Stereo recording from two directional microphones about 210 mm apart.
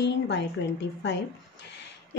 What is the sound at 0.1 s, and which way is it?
A woman's voice, 55° left (ahead or behind).